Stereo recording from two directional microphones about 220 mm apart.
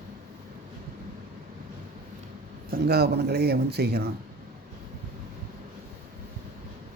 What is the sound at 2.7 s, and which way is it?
Speech, 45° right (ahead or behind).